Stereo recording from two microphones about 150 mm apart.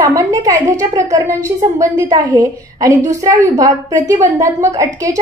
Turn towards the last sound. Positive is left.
turn(degrees=-25)  # may be behind; listen again after turning